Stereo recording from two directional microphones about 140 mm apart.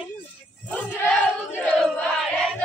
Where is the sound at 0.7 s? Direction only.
10° left (ahead or behind).